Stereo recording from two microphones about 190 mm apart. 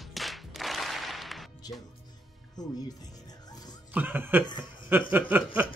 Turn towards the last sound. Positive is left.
turn(degrees=-10)  # may be behind; listen again after turning